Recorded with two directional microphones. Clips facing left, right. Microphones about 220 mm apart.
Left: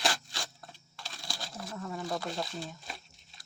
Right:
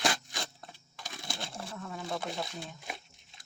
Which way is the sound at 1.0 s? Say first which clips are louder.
Right 3 dB; 20° right (ahead or behind).